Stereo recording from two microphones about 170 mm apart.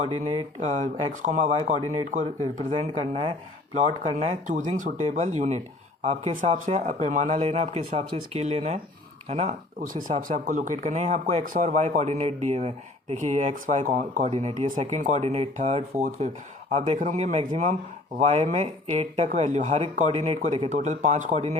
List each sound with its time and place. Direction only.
0.6 s speech: 45° right (ahead or behind)
14.3 s speech: 35° right (ahead or behind)
17.0 s speech: 50° right (ahead or behind)